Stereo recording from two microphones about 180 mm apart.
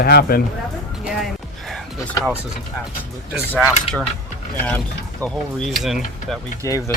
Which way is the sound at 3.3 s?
5° right (ahead or behind).